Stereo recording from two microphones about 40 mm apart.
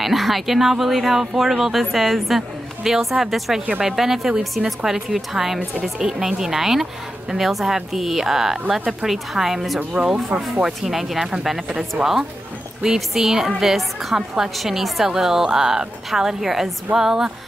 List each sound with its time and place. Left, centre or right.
0.0 s a woman's voice: centre
5.8 s a woman's voice: centre
10.0 s speech: centre
10.6 s a woman's voice: centre
14.6 s a woman's voice: centre